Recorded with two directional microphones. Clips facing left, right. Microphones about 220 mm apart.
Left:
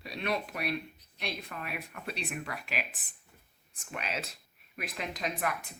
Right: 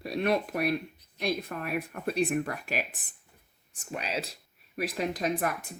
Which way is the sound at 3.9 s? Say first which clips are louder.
Right 4 dB; 30° right (ahead or behind).